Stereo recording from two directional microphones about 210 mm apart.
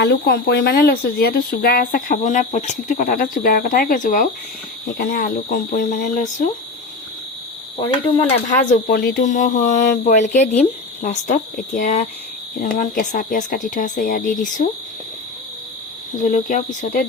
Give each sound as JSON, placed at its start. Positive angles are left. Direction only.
{"t": 0.0, "sound": "speech", "side_deg": 50}
{"t": 7.8, "sound": "speech", "side_deg": 25}
{"t": 8.4, "sound": "speech", "side_deg": 35}
{"t": 16.3, "sound": "speech", "side_deg": 40}